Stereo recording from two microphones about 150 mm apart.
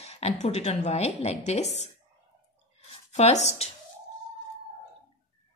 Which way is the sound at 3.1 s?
50° left (ahead or behind).